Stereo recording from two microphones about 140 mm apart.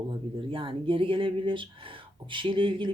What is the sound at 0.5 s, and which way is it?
Speech, 40° right (ahead or behind).